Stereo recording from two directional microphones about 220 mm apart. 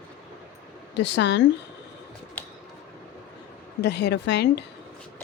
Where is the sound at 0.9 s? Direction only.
55° left (ahead or behind).